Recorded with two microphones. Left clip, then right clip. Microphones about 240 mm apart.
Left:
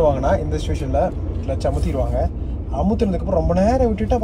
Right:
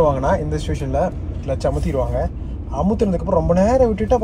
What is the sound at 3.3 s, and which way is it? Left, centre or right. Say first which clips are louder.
Speech: right 3 dB; right.